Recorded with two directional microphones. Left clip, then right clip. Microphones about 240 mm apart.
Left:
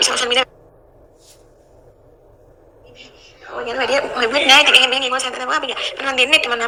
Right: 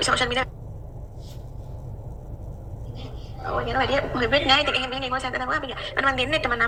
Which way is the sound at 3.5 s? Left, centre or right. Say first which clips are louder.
Left 5 dB; left.